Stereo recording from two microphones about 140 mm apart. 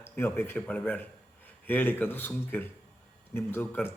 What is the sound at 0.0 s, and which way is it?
A man's voice, 15° left (ahead or behind).